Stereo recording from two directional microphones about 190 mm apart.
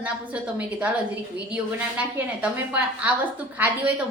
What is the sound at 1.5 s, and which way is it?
A woman's voice, 10° right (ahead or behind).